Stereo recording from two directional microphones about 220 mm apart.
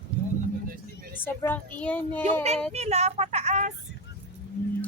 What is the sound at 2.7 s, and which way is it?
Speech, 30° right (ahead or behind).